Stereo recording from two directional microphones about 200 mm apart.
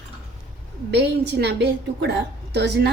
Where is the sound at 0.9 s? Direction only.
60° right (ahead or behind).